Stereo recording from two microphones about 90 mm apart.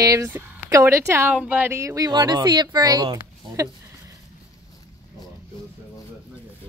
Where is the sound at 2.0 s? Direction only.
50° right (ahead or behind).